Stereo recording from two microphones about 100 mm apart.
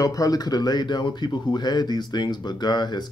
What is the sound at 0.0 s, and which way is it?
Speech, 35° left (ahead or behind).